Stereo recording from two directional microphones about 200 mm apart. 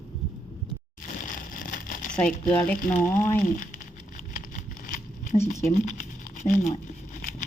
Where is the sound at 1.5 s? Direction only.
40° left (ahead or behind).